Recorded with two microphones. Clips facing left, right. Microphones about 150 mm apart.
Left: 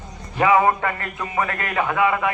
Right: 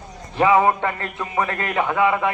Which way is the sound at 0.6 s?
25° right (ahead or behind).